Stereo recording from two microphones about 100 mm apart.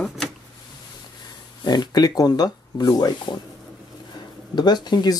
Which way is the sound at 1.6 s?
45° left (ahead or behind).